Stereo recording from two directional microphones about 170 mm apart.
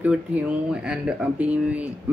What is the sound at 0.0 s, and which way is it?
Speech, 10° right (ahead or behind).